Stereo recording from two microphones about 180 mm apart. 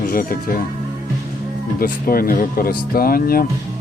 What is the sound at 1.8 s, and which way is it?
Speech, 55° left (ahead or behind).